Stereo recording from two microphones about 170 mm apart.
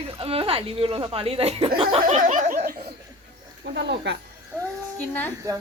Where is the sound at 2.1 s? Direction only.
45° right (ahead or behind).